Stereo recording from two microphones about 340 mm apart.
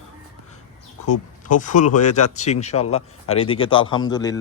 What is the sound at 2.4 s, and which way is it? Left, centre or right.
Speech, centre.